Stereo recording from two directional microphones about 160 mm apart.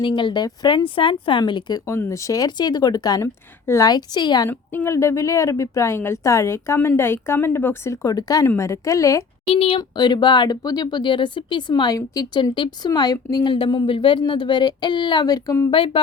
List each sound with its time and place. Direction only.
0.0 s speech: 30° left (ahead or behind)
4.4 s a woman's voice: 15° left (ahead or behind)
9.5 s speech: 35° left (ahead or behind); by 15.7 s 20° left (ahead or behind)
15.7 s speech: 35° left (ahead or behind)